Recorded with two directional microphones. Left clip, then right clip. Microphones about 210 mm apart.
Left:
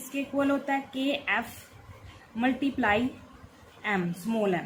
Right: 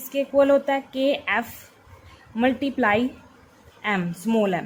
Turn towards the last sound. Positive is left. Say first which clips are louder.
# right 6 dB
turn(degrees=-45)  # may be behind; listen again after turning